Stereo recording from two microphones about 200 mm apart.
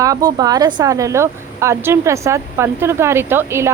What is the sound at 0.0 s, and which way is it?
A woman's voice, 20° right (ahead or behind).